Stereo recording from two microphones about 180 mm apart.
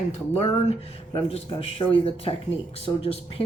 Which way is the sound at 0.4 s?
35° left (ahead or behind).